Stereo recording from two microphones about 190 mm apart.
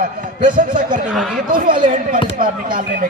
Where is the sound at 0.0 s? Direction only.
45° right (ahead or behind).